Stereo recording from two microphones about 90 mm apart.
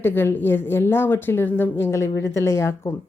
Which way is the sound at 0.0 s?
25° left (ahead or behind).